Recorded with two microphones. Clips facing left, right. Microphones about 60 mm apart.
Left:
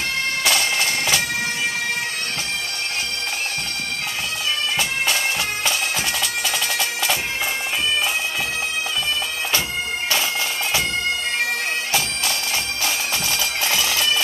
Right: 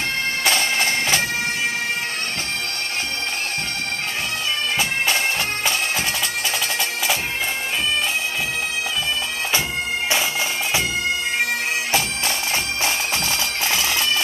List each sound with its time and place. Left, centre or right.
0.5 s bagpipes: right
12.8 s bagpipes: right